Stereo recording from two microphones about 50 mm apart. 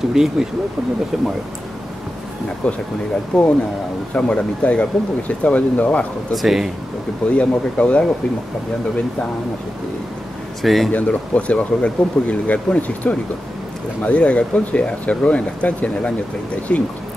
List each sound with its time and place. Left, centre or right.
0.1 s speech: centre
2.6 s speech: left
6.3 s speech: centre
7.2 s speech: left
10.6 s speech: centre
10.9 s speech: left